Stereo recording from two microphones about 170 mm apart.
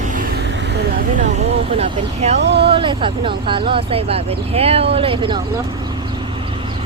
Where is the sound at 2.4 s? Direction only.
85° right.